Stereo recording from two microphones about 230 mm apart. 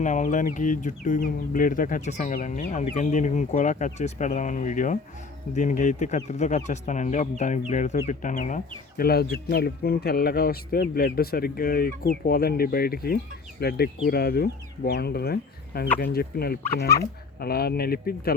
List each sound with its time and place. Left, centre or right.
0.0 s speech: left